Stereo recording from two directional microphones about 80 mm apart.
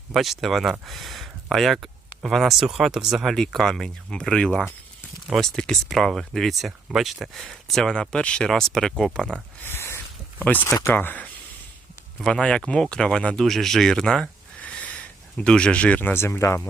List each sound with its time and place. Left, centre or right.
0.1 s speech: centre
3.3 s speech: centre
9.6 s a sound: left
10.8 s speech: left
12.2 s speech: centre
16.1 s speech: left